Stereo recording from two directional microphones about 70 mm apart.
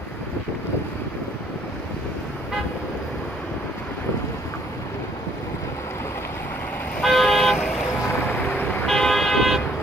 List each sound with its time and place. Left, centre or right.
7.0 s vehicle: centre
8.3 s vehicle: left
8.8 s vehicle: centre